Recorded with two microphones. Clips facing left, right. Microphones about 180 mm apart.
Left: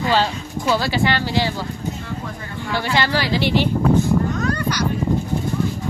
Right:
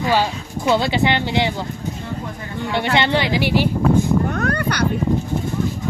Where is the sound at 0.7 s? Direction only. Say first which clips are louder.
Right 2 dB; 20° right (ahead or behind).